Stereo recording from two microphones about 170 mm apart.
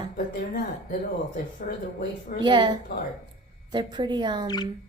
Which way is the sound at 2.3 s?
25° right (ahead or behind).